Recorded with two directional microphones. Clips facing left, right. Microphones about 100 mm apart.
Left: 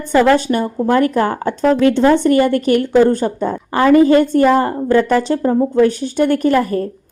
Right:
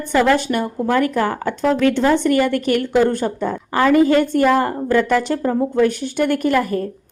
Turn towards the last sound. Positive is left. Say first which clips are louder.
# left 3 dB
turn(degrees=35)  # may be behind; listen again after turning